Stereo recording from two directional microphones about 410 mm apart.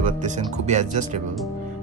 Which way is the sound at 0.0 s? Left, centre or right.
Centre.